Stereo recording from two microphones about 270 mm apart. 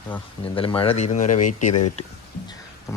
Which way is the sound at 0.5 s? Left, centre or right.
Centre.